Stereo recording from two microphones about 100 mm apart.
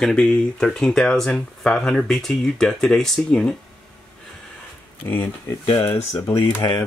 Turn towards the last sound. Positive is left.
turn(degrees=25)  # may be behind; listen again after turning